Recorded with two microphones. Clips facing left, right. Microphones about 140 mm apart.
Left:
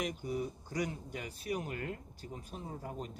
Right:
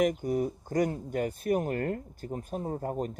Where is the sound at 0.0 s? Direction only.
50° right (ahead or behind).